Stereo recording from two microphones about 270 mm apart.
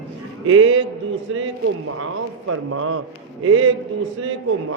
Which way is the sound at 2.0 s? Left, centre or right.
Right.